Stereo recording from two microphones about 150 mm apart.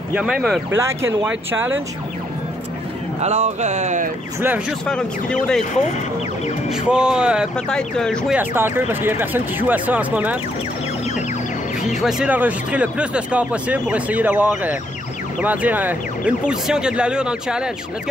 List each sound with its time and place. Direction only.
0.1 s speech: 5° right (ahead or behind)
0.7 s speech: 20° right (ahead or behind)
3.2 s speech: 50° right (ahead or behind)
4.4 s speech: 15° right (ahead or behind)
4.8 s speech: 5° left (ahead or behind)
6.7 s speech: 5° right (ahead or behind)
7.5 s speech: 5° left (ahead or behind)
8.3 s speech: 15° right (ahead or behind)
12.0 s speech: 5° right (ahead or behind)